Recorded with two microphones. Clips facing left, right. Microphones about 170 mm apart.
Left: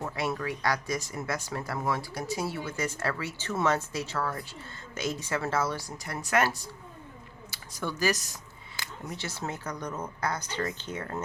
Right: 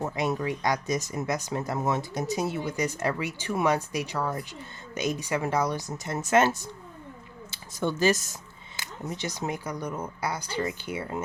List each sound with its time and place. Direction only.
0.0 s speech: 20° right (ahead or behind)